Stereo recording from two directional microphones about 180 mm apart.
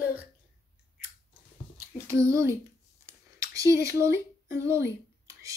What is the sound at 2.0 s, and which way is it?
Child singing, 15° right (ahead or behind).